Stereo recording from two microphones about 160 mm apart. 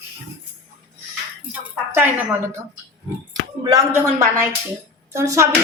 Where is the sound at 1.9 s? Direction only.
15° right (ahead or behind).